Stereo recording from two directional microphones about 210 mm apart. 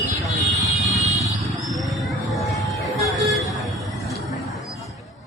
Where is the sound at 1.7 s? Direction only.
Centre (ahead or behind).